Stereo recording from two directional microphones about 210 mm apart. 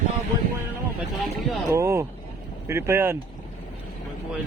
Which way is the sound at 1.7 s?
15° right (ahead or behind).